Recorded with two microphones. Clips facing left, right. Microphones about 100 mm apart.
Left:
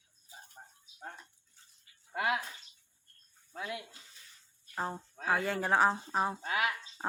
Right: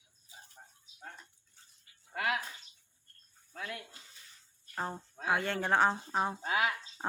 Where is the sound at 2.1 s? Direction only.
20° left (ahead or behind).